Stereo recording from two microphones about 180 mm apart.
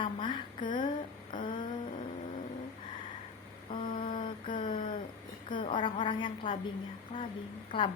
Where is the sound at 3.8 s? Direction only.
45° left (ahead or behind).